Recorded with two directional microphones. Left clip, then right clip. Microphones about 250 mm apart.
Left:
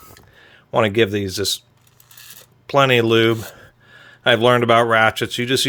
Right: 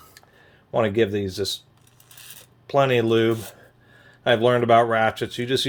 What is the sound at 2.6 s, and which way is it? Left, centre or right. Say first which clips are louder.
Speech: left 4 dB; left.